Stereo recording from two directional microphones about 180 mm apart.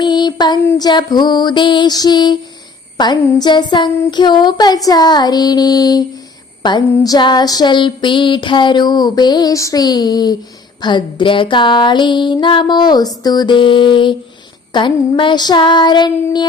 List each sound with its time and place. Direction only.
0.0 s female singing: 25° left (ahead or behind)